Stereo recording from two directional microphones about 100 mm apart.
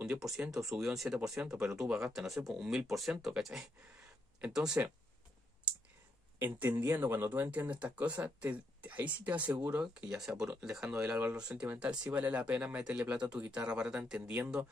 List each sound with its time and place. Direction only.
0.0 s speech: 5° right (ahead or behind)
6.4 s speech: 20° right (ahead or behind)
11.1 s speech: 20° right (ahead or behind)
11.3 s speech: 10° right (ahead or behind)